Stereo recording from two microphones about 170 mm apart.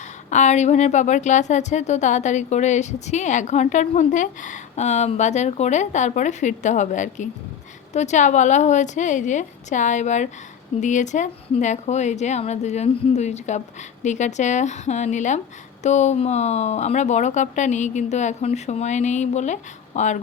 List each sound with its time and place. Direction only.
0.3 s a woman's voice: 45° left (ahead or behind)